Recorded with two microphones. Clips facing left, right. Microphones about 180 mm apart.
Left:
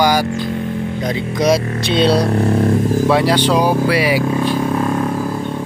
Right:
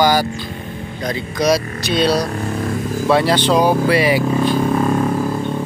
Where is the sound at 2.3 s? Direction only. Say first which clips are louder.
Left 7 dB; 60° left (ahead or behind).